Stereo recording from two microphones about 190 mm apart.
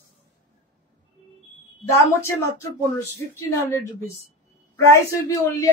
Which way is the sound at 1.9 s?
15° left (ahead or behind).